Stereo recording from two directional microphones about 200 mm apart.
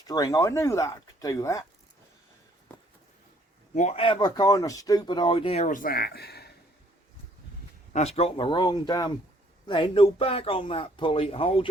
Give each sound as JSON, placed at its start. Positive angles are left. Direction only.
{"t": 0.1, "sound": "speech", "side_deg": 20}
{"t": 3.8, "sound": "speech", "side_deg": 30}
{"t": 7.9, "sound": "speech", "side_deg": 30}